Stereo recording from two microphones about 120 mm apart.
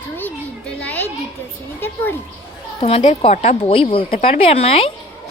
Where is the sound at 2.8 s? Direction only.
60° left (ahead or behind).